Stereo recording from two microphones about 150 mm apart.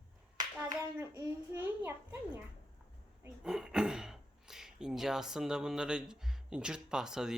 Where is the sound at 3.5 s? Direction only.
5° right (ahead or behind).